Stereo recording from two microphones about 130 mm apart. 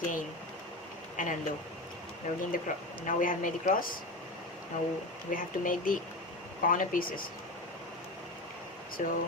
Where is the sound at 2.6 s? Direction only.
90° left.